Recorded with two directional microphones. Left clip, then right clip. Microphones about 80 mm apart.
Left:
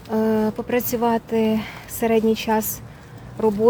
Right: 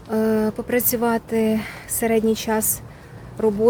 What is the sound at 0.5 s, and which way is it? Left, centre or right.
A woman's voice, right.